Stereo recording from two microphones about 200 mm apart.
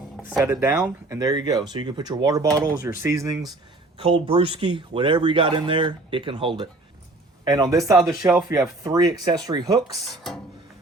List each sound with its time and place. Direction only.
0.3 s speech: 15° right (ahead or behind)
3.9 s speech: 25° right (ahead or behind)
10.1 s speech: centre (ahead or behind)